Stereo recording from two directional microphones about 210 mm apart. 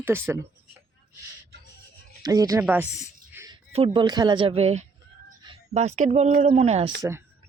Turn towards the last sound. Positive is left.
turn(degrees=-10)  # may be behind; listen again after turning